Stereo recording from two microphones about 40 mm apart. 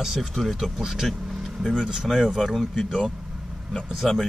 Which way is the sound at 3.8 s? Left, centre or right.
Centre.